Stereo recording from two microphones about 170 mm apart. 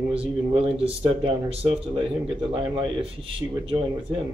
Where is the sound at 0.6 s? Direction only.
35° right (ahead or behind).